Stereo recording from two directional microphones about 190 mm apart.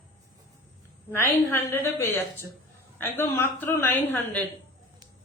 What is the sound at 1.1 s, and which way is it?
A woman's voice, 10° left (ahead or behind).